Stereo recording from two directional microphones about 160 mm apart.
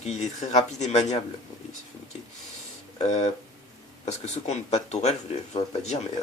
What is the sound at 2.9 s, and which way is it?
Speech, 45° left (ahead or behind).